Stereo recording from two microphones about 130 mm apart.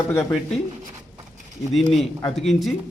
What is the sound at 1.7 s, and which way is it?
A man's voice, centre (ahead or behind).